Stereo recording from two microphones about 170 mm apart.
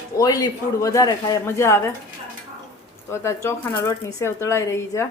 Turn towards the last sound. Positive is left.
turn(degrees=15)  # may be behind; listen again after turning